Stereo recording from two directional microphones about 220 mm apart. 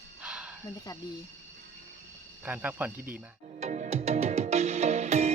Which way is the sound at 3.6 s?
30° right (ahead or behind).